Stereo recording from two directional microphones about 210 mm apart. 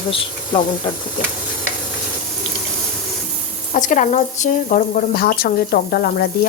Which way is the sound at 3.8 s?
35° left (ahead or behind).